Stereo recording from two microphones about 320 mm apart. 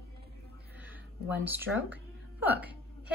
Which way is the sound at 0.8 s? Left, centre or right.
Centre.